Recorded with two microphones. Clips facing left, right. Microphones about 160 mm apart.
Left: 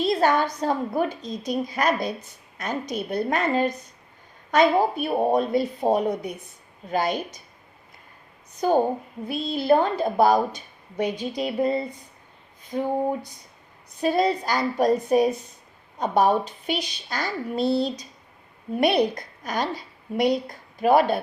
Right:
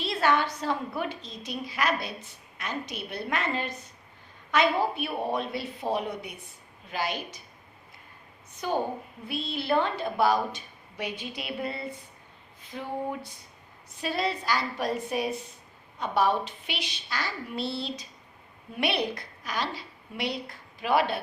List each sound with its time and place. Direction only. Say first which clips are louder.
0.0 s a sound: left 5 dB; 45° left (ahead or behind)
0.6 s a woman's voice: left 6 dB; 45° left (ahead or behind)
8.6 s a woman's voice: left 8 dB; 40° left (ahead or behind)